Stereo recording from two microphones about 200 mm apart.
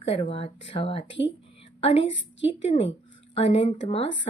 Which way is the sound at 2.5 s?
30° left (ahead or behind).